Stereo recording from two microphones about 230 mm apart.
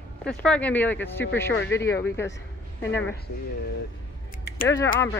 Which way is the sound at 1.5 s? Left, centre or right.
Left.